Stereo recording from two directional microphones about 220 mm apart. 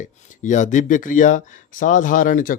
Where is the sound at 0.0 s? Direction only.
35° left (ahead or behind).